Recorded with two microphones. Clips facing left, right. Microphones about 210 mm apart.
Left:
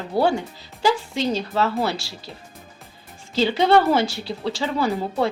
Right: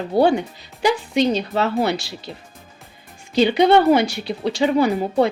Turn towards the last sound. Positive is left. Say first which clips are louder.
# right 5 dB
turn(degrees=-15)  # may be behind; listen again after turning